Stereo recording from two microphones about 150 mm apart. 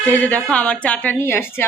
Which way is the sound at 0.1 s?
10° left (ahead or behind).